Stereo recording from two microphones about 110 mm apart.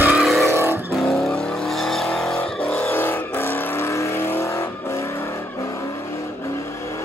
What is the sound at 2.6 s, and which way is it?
Vehicle, 15° left (ahead or behind).